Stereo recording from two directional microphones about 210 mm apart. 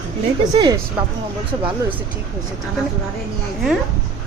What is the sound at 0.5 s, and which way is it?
Speech, 20° right (ahead or behind).